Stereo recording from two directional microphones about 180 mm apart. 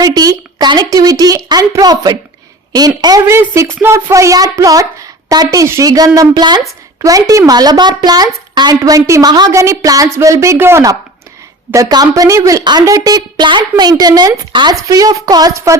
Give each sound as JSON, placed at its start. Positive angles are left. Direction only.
{"t": 0.0, "sound": "a woman's voice", "side_deg": -20}